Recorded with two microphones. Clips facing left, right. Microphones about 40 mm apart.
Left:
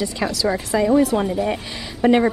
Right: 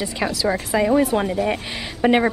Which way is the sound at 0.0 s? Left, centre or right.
Centre.